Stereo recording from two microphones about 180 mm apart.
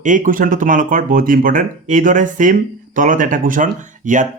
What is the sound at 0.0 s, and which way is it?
Speech, 45° right (ahead or behind).